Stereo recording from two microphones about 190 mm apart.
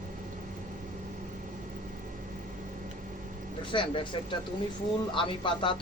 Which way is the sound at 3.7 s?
25° left (ahead or behind).